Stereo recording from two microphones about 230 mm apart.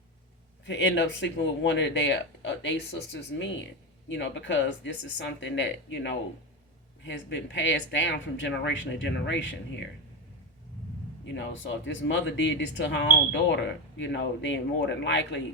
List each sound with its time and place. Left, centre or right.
0.6 s speech: left
11.7 s speech: left